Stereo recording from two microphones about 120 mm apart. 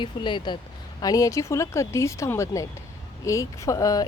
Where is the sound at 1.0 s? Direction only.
30° left (ahead or behind).